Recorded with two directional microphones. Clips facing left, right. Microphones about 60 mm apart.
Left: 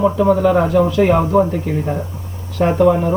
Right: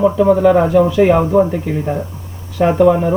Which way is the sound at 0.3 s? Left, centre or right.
Centre.